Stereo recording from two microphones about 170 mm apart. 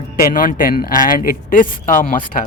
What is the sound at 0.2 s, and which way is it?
A man's voice, 55° left (ahead or behind).